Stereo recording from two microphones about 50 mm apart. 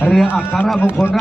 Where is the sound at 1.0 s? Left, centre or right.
Centre.